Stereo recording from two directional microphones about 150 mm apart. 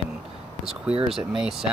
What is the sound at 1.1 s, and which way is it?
Speech, 5° right (ahead or behind).